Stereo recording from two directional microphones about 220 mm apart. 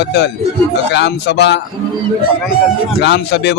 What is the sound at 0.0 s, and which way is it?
A man's voice, 50° left (ahead or behind).